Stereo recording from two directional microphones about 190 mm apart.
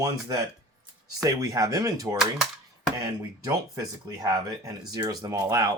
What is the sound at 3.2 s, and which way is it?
Speech, 15° right (ahead or behind).